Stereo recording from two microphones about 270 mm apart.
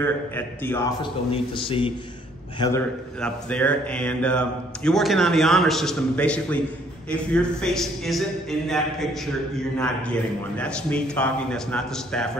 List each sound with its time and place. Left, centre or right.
0.0 s a man's voice: centre
3.2 s speech: centre